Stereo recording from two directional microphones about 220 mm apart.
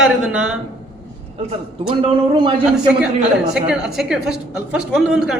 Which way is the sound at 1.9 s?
20° right (ahead or behind).